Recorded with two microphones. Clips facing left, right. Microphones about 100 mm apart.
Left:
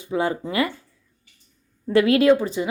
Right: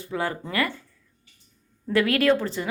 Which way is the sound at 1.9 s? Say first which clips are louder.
Left 5 dB; 25° left (ahead or behind).